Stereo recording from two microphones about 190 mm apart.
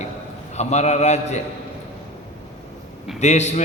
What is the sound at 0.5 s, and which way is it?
Speech, 35° left (ahead or behind).